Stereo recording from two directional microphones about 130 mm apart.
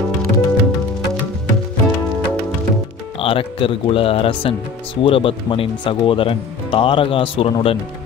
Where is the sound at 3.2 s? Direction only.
45° left (ahead or behind).